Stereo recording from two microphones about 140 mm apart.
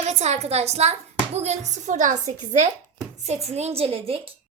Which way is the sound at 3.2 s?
50° right (ahead or behind).